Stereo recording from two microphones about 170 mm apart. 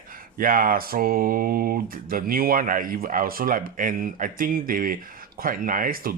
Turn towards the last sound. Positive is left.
turn(degrees=-55)  # may be behind; listen again after turning